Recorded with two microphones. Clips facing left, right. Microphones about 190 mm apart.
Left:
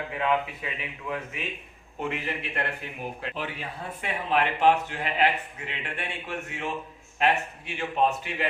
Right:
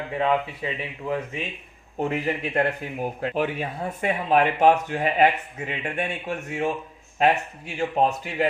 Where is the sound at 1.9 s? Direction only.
40° right (ahead or behind).